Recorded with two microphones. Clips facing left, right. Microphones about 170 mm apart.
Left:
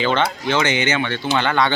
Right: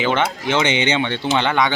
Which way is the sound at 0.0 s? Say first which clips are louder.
Even; 15° right (ahead or behind).